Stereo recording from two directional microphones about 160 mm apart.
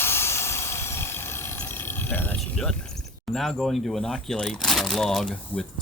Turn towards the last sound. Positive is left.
turn(degrees=5)  # may be behind; listen again after turning